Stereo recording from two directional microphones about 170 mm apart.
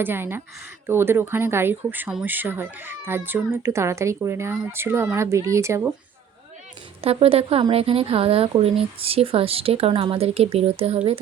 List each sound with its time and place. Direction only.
0.0 s speech: 10° right (ahead or behind)
7.0 s speech: 35° right (ahead or behind)